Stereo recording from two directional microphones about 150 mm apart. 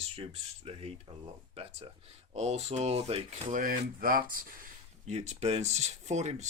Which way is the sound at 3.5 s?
65° right (ahead or behind).